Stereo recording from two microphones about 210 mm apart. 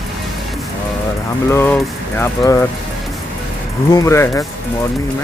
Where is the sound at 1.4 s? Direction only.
10° left (ahead or behind).